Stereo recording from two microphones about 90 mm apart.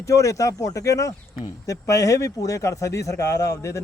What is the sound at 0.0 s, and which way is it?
A man's voice, 35° left (ahead or behind).